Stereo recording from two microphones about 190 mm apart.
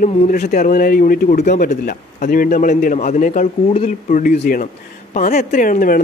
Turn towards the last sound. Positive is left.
turn(degrees=45)  # may be behind; listen again after turning